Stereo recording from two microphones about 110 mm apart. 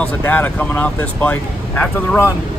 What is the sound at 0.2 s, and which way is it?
Speech, 20° left (ahead or behind).